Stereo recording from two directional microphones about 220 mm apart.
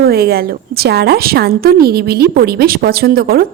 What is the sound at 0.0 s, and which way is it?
A woman's voice, 45° right (ahead or behind).